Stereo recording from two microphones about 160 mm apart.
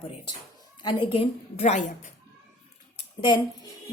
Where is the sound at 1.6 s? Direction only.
45° left (ahead or behind).